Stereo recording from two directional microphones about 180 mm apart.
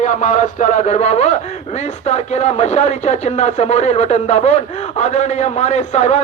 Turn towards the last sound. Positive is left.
turn(degrees=40)  # may be behind; listen again after turning